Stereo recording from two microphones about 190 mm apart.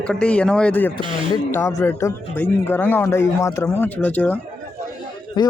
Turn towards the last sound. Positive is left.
turn(degrees=20)  # may be behind; listen again after turning